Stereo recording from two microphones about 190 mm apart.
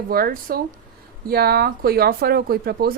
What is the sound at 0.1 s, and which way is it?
Speech, 50° right (ahead or behind).